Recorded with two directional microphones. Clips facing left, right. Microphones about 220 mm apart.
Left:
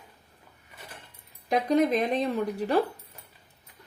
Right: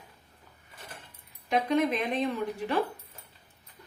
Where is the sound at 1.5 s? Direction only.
40° left (ahead or behind).